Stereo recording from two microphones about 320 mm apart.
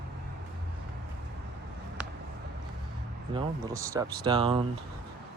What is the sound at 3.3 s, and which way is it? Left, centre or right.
Speech, centre.